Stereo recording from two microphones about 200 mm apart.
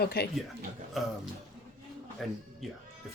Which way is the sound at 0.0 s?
50° left (ahead or behind).